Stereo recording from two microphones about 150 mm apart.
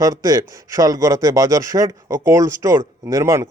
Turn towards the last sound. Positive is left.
turn(degrees=-20)  # may be behind; listen again after turning